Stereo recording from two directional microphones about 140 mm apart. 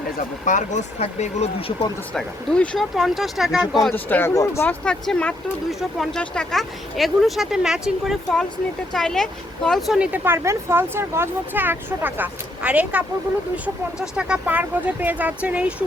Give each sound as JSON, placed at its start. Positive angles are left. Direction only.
{"t": 0.4, "sound": "speech", "side_deg": 60}
{"t": 2.1, "sound": "speech", "side_deg": 5}
{"t": 3.9, "sound": "speech", "side_deg": 15}